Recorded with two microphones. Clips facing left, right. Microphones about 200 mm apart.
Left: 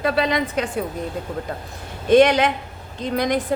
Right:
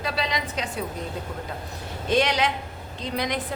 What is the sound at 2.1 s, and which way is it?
A woman's voice, 55° left (ahead or behind).